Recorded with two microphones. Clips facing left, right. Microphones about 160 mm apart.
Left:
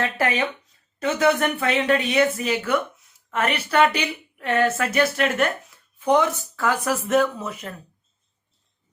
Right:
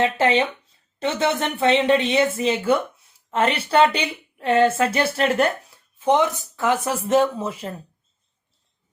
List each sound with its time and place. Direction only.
0.0 s speech: 25° right (ahead or behind)